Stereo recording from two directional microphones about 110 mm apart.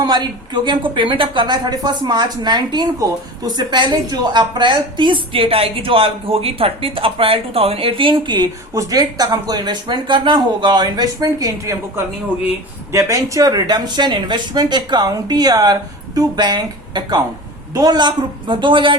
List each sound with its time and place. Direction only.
0.0 s speech: 40° right (ahead or behind)
12.9 s speech: 25° right (ahead or behind); by 18.9 s 50° right (ahead or behind)